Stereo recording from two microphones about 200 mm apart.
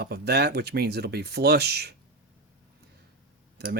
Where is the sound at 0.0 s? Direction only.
55° right (ahead or behind).